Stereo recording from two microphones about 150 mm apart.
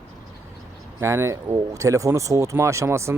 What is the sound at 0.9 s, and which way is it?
Speech, 20° right (ahead or behind).